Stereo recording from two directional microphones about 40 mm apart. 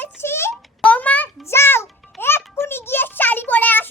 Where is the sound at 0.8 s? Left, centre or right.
Left.